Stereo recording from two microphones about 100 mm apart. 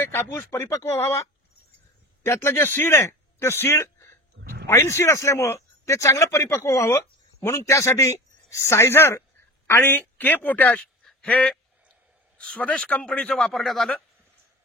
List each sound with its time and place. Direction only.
0.0 s a man's voice: 20° left (ahead or behind)
11.1 s a sound: 10° left (ahead or behind)
12.4 s a woman's voice: 10° left (ahead or behind)